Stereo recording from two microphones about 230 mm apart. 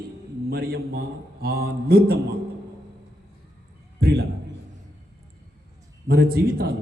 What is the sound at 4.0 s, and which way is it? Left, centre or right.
Speech, right.